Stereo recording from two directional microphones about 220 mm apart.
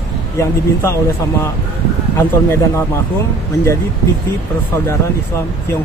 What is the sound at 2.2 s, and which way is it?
Speech, 10° left (ahead or behind).